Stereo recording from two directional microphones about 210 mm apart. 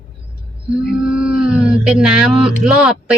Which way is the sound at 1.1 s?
5° right (ahead or behind).